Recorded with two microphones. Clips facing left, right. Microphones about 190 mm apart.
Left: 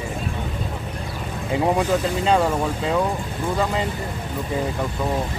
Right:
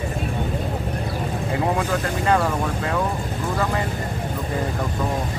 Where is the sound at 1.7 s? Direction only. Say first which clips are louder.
Left 3 dB; 15° left (ahead or behind).